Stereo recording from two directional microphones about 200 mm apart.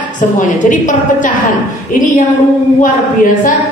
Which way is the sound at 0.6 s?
40° left (ahead or behind).